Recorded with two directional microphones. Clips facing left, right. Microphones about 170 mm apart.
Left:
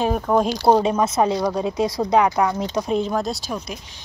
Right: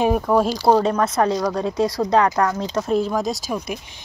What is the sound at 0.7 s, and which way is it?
Speech, 15° left (ahead or behind).